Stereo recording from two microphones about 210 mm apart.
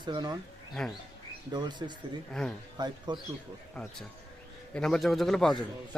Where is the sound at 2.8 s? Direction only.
20° right (ahead or behind).